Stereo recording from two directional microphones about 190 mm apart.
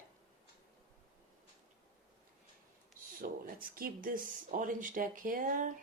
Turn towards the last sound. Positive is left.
turn(degrees=-45)  # may be behind; listen again after turning